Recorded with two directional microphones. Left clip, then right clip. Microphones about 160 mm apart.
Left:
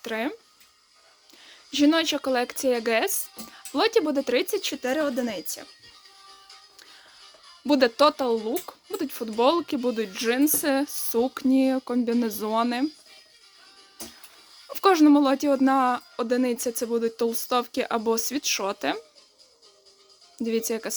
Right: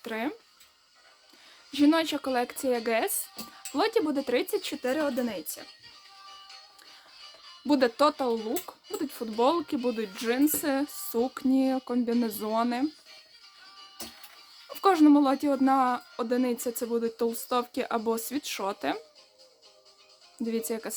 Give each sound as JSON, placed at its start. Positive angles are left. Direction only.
{"t": 0.0, "sound": "speech", "side_deg": 15}
{"t": 1.5, "sound": "speech", "side_deg": 15}
{"t": 7.7, "sound": "speech", "side_deg": 15}
{"t": 14.7, "sound": "speech", "side_deg": 15}
{"t": 20.4, "sound": "speech", "side_deg": 15}